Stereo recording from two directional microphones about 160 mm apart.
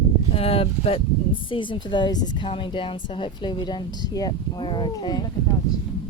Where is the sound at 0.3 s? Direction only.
35° left (ahead or behind).